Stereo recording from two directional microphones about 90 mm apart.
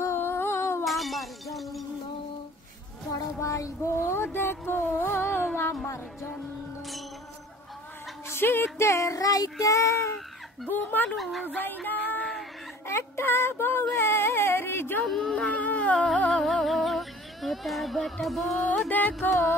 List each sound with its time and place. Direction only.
0.0 s humming: 25° left (ahead or behind)
0.8 s shatter: centre (ahead or behind)
3.1 s a sound: 40° left (ahead or behind)
5.5 s music: 25° left (ahead or behind)
8.3 s child singing: 25° left (ahead or behind)
10.7 s speech: 20° left (ahead or behind)
11.1 s music: centre (ahead or behind)
11.4 s music: 20° left (ahead or behind)
12.8 s child singing: 30° left (ahead or behind)
13.9 s a sound: 25° left (ahead or behind)
15.0 s music: 5° left (ahead or behind)
15.4 s music: 15° left (ahead or behind)
18.9 s speech: 20° left (ahead or behind)